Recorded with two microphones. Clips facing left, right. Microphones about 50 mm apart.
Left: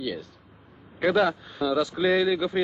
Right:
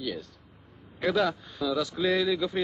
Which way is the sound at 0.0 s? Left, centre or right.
Centre.